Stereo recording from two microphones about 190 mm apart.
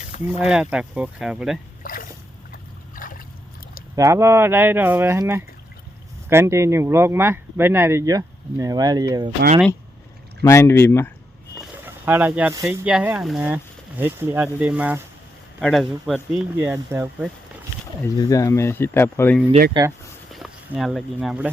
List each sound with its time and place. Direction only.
0.3 s speech: 5° right (ahead or behind)
1.8 s a sound: 45° left (ahead or behind)
3.9 s speech: 15° right (ahead or behind)
10.4 s speech: 15° left (ahead or behind)
11.6 s a sound: 10° right (ahead or behind)
12.8 s speech: 5° right (ahead or behind)
16.6 s speech: 10° right (ahead or behind)
18.2 s speech: 20° left (ahead or behind)
19.8 s speech: 25° right (ahead or behind)
20.3 s speech: centre (ahead or behind)